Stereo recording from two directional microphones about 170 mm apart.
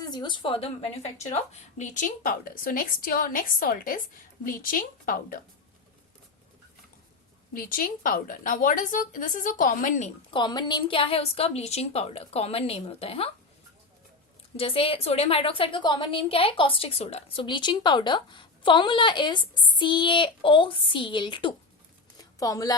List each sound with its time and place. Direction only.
0.0 s a woman's voice: 25° left (ahead or behind); by 5.4 s 55° left (ahead or behind)
7.5 s speech: 55° left (ahead or behind)
10.3 s a woman's voice: 25° left (ahead or behind)
14.5 s a woman's voice: 35° left (ahead or behind)
22.2 s a sound: 20° left (ahead or behind)